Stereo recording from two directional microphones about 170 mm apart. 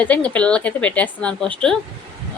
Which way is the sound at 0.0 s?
10° left (ahead or behind).